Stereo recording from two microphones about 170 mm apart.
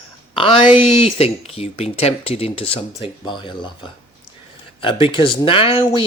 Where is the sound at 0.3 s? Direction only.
30° left (ahead or behind).